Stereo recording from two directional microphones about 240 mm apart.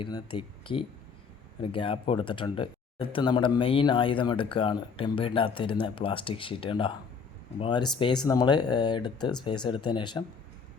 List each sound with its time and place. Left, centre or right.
0.0 s speech: centre